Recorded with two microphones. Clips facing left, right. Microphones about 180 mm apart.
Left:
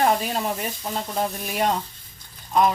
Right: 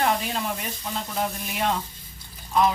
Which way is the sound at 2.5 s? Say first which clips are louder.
Left 2 dB; 45° left (ahead or behind).